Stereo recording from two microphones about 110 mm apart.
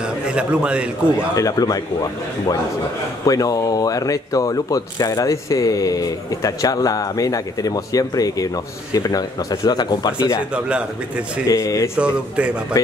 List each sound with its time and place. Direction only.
0.3 s a man's voice: 10° right (ahead or behind)
1.3 s speech: 30° left (ahead or behind)
3.3 s speech: 30° left (ahead or behind)
10.5 s a man's voice: 10° right (ahead or behind)
11.4 s speech: 30° left (ahead or behind)
12.0 s a man's voice: 10° right (ahead or behind)
12.7 s speech: 30° left (ahead or behind)